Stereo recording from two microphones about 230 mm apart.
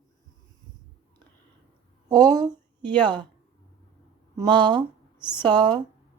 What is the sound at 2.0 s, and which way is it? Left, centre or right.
Speech, centre.